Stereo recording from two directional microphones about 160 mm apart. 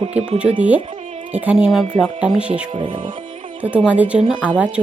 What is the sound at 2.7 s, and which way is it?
Speech, 35° right (ahead or behind).